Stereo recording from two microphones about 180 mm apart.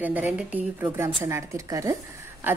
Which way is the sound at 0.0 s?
10° right (ahead or behind).